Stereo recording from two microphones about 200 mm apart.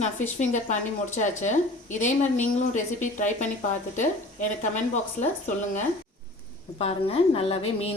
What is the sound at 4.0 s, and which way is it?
A woman's voice, 35° left (ahead or behind).